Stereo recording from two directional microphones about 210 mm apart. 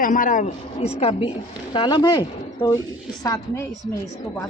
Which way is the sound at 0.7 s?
30° left (ahead or behind).